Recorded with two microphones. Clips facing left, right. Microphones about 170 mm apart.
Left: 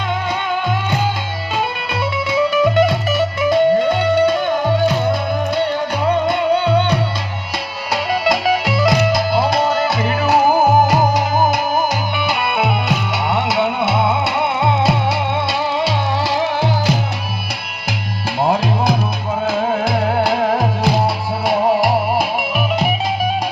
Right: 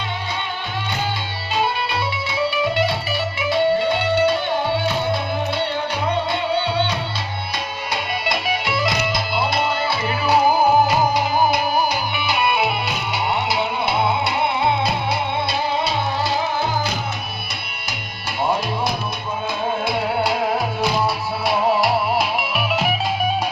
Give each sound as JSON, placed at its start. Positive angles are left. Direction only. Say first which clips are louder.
{"t": 2.5, "sound": "music", "louder": "left 6 dB", "side_deg": 45}
{"t": 6.2, "sound": "music", "louder": "left 6 dB", "side_deg": 45}
{"t": 8.2, "sound": "music", "louder": "left 7 dB", "side_deg": 40}
{"t": 15.8, "sound": "music", "louder": "left 3 dB", "side_deg": 90}
{"t": 20.1, "sound": "music", "louder": "left 4 dB", "side_deg": 50}